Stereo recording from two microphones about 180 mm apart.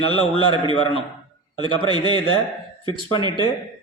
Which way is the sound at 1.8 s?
25° right (ahead or behind).